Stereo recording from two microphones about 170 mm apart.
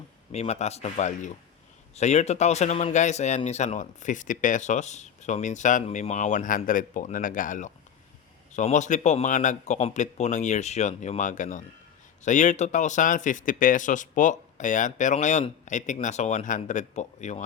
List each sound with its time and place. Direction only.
0.3 s speech: 40° left (ahead or behind)